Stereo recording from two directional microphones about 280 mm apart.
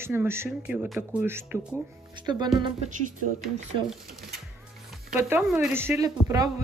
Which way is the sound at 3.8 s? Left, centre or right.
Centre.